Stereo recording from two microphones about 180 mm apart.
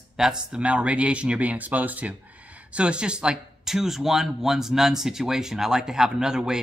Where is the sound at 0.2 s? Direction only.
5° right (ahead or behind).